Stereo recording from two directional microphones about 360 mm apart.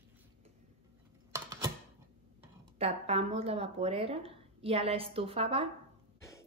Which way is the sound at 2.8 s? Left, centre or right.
Centre.